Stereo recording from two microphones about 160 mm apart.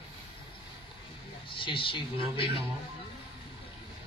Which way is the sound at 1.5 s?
30° left (ahead or behind).